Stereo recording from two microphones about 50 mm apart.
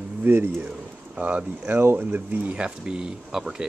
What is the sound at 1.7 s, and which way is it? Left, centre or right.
Speech, right.